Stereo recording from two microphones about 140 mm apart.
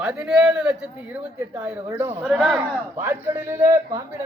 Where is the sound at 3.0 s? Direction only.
20° right (ahead or behind).